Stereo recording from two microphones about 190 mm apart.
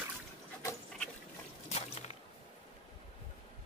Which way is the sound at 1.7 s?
35° left (ahead or behind).